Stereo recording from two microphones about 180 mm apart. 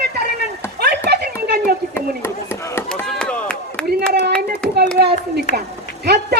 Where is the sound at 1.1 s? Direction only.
65° right (ahead or behind).